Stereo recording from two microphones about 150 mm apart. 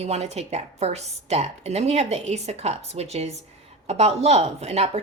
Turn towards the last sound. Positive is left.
turn(degrees=-45)  # may be behind; listen again after turning